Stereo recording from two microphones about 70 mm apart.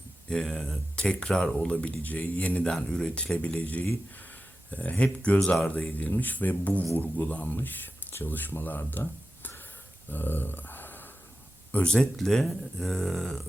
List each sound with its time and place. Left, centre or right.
0.3 s speech: centre
2.6 s speech: centre; by 8.8 s left
8.9 s a sound: left
11.7 s speech: centre